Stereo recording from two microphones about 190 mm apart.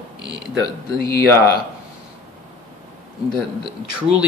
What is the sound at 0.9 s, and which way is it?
Speech, 50° left (ahead or behind).